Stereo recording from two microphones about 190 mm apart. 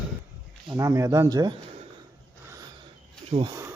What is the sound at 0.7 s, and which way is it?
Speech, 15° right (ahead or behind).